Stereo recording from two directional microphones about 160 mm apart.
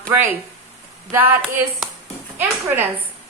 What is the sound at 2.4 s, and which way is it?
Speech, 10° right (ahead or behind).